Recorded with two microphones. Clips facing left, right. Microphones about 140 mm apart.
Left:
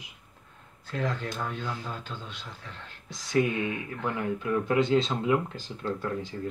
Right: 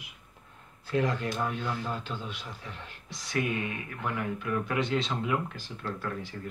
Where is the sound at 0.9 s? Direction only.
5° right (ahead or behind).